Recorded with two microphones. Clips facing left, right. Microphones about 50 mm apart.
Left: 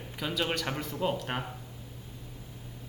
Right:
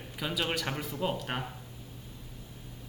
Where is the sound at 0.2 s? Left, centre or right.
Centre.